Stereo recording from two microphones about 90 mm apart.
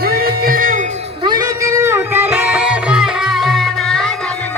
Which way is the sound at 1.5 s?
35° right (ahead or behind).